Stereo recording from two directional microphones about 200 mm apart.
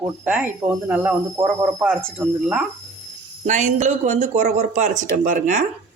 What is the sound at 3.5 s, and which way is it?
A man's voice, 40° right (ahead or behind).